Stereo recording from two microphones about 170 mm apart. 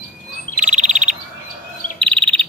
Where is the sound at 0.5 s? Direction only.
50° right (ahead or behind).